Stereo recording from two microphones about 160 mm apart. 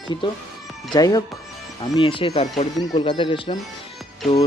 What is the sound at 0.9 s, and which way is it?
Speech, 25° left (ahead or behind).